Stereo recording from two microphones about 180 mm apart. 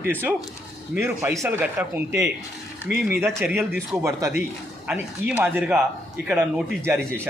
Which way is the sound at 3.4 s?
Centre (ahead or behind).